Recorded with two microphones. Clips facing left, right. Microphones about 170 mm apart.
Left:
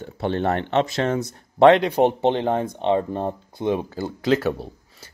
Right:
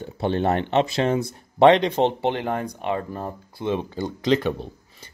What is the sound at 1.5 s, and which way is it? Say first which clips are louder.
Speech: left 1 dB; centre (ahead or behind).